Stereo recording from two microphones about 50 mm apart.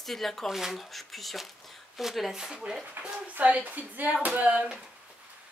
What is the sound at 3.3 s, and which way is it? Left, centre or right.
Speech, right.